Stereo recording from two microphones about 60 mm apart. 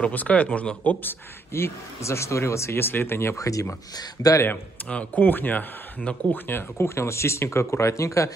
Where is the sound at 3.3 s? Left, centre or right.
Left.